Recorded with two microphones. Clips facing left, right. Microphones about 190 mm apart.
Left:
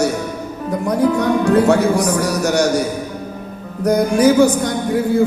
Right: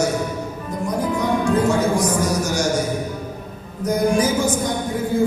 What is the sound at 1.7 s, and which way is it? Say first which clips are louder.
Speech: left 4 dB; 65° left (ahead or behind).